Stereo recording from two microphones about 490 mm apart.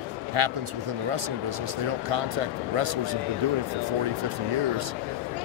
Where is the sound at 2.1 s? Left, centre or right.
Right.